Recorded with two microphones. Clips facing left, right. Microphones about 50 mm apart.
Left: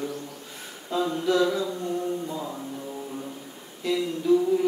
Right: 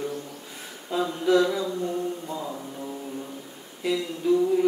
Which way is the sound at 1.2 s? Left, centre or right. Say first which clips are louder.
Right 3 dB; centre.